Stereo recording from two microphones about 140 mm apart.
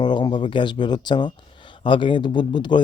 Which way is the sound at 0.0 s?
30° left (ahead or behind).